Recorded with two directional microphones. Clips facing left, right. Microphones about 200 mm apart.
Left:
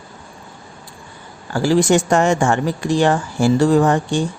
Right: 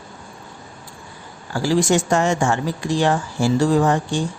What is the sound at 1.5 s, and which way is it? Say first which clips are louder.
Speech: left 3 dB; 60° left (ahead or behind).